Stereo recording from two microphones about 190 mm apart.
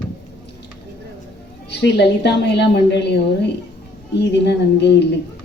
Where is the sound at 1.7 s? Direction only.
60° left (ahead or behind).